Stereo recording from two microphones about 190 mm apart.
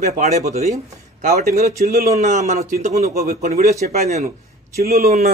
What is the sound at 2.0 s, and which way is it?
A man's voice, 35° right (ahead or behind).